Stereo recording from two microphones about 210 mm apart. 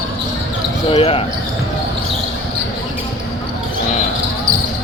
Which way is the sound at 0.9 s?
25° left (ahead or behind).